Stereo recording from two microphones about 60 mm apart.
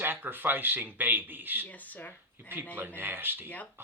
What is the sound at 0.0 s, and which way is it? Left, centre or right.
A man's voice, right.